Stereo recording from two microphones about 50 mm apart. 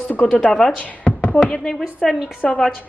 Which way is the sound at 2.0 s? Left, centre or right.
Centre.